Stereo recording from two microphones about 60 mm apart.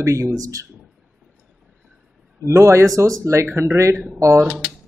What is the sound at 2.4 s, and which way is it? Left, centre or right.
Speech, right.